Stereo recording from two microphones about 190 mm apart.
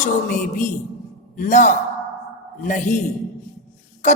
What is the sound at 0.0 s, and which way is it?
A woman's voice, 40° left (ahead or behind).